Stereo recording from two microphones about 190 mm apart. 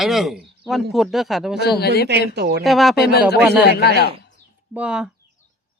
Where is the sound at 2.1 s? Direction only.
60° right (ahead or behind).